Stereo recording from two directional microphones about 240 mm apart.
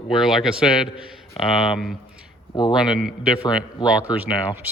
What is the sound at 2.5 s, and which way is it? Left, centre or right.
Speech, centre.